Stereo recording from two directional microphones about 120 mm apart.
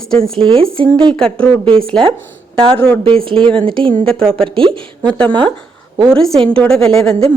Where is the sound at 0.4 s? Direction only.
50° right (ahead or behind).